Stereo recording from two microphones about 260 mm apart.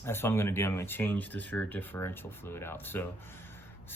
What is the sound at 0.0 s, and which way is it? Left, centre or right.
Speech, centre.